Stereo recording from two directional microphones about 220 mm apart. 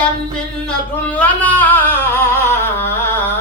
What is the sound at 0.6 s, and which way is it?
Singing, 5° left (ahead or behind).